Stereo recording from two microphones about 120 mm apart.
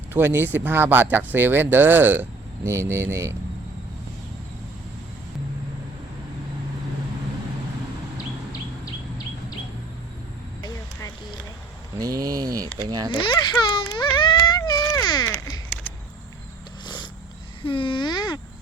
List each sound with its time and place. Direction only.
0.1 s speech: 20° right (ahead or behind)
11.9 s speech: 30° right (ahead or behind)
13.2 s speech: 40° left (ahead or behind)
13.9 s a sound: 40° left (ahead or behind)
17.6 s speech: 45° left (ahead or behind)